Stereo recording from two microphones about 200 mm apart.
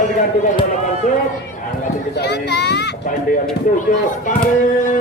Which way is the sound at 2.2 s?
55° left (ahead or behind).